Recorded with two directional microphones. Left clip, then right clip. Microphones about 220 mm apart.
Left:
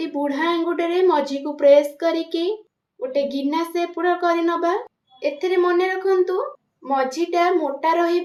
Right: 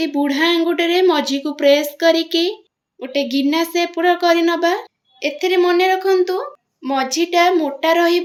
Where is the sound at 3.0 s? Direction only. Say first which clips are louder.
Right 3 dB; 35° right (ahead or behind).